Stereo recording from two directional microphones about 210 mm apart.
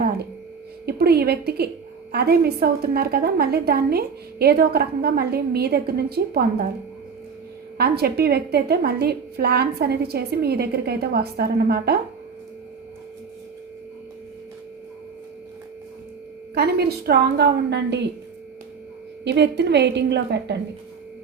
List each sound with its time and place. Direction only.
0.9 s a woman's voice: 50° right (ahead or behind)
7.8 s a woman's voice: 50° right (ahead or behind)
16.6 s a woman's voice: 50° right (ahead or behind)
19.2 s a woman's voice: 55° right (ahead or behind)